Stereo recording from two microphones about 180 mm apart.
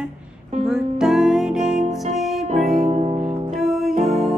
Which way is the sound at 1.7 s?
40° right (ahead or behind).